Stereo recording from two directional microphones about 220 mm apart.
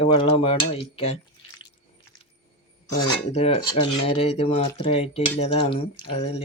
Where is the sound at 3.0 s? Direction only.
25° left (ahead or behind).